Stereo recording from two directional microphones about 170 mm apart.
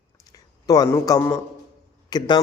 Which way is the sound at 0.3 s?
20° left (ahead or behind).